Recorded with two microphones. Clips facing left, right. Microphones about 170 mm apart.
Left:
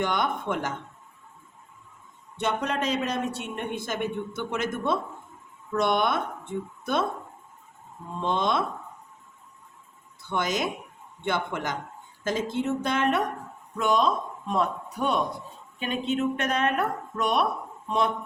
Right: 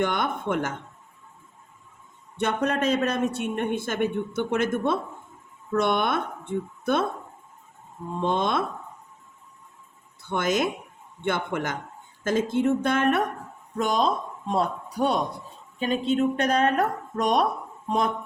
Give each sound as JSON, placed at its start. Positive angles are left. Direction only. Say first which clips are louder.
{"t": 0.0, "sound": "a man's voice", "louder": "right 1 dB", "side_deg": -55}
{"t": 2.4, "sound": "a man's voice", "louder": "right 3 dB", "side_deg": -50}
{"t": 8.2, "sound": "a man's voice", "louder": "right 1 dB", "side_deg": -50}
{"t": 10.2, "sound": "a man's voice", "louder": "right 3 dB", "side_deg": -50}
{"t": 13.7, "sound": "a man's voice", "louder": "even", "side_deg": -35}